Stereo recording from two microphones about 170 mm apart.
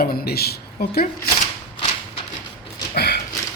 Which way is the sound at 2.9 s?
75° left (ahead or behind).